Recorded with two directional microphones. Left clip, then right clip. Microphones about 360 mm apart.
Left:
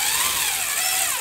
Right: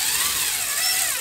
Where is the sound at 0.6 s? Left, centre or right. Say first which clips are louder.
Even; centre.